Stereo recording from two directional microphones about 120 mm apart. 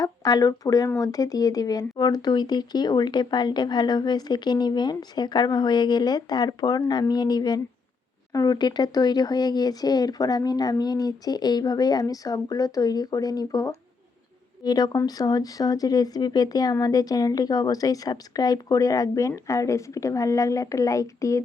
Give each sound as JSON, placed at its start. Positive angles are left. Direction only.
{"t": 0.0, "sound": "speech", "side_deg": 30}